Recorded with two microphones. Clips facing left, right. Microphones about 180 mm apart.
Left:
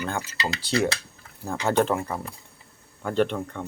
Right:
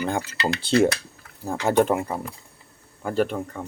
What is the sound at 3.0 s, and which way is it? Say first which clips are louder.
Speech: even; 5° right (ahead or behind).